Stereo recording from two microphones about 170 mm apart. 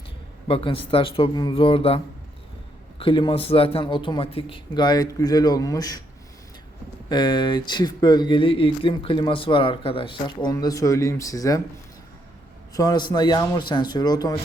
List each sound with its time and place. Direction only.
0.4 s speech: 30° left (ahead or behind)
3.0 s speech: 30° left (ahead or behind)
7.1 s speech: 25° left (ahead or behind)
12.7 s speech: 25° left (ahead or behind)